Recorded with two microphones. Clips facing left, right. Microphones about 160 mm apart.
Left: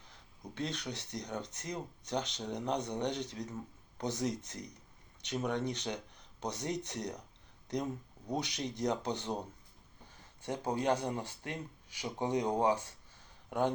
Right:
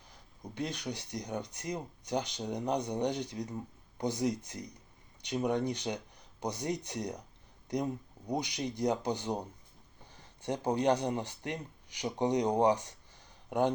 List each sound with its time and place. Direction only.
0.5 s speech: 15° right (ahead or behind)
8.3 s speech: 10° right (ahead or behind)